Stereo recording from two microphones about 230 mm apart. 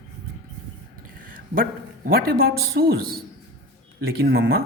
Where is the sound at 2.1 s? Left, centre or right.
Right.